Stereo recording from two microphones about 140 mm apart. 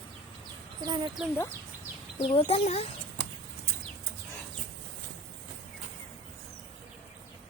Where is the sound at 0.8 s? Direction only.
30° right (ahead or behind).